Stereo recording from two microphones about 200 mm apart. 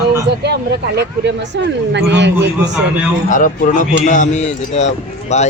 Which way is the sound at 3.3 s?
40° left (ahead or behind).